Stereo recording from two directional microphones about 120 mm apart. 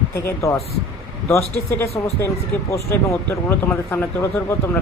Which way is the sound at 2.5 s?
15° left (ahead or behind).